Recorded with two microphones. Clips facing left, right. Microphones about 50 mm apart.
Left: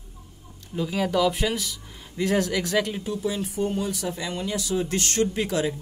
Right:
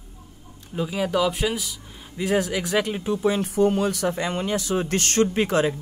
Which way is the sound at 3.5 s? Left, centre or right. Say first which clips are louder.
Right 6 dB; right.